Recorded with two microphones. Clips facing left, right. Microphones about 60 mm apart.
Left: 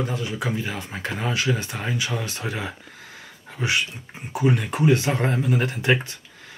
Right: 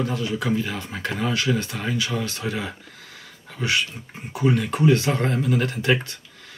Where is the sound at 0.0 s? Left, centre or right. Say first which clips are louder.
Right 2 dB; left.